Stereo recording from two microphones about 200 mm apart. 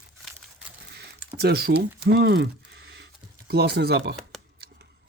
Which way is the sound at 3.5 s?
55° right (ahead or behind).